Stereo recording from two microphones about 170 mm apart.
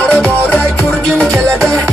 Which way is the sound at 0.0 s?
5° left (ahead or behind).